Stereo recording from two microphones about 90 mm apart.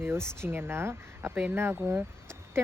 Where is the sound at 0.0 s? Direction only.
30° right (ahead or behind).